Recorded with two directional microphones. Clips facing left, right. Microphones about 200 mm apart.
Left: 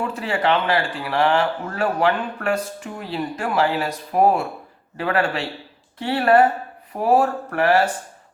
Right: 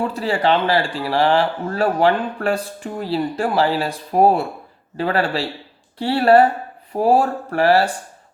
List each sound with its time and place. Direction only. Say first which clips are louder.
0.1 s speech: right 3 dB; 35° right (ahead or behind)